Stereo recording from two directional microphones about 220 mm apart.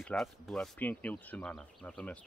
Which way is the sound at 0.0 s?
Centre (ahead or behind).